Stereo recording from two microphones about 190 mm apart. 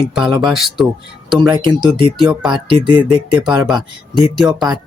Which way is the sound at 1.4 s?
25° right (ahead or behind).